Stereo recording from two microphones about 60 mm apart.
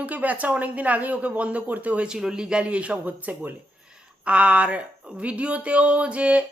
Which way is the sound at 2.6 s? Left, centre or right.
Right.